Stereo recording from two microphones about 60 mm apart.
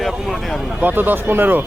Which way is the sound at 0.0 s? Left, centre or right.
Centre.